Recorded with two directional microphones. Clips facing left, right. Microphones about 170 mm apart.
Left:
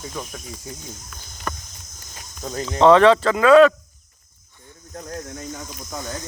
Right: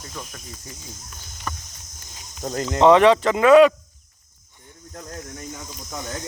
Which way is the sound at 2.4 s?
45° right (ahead or behind).